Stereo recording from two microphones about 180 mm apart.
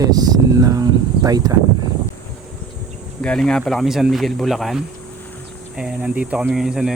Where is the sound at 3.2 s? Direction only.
5° left (ahead or behind).